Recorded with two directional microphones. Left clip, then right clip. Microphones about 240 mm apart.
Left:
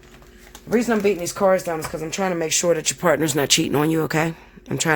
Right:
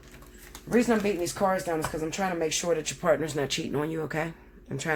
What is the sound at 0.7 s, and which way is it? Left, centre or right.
Speech, left.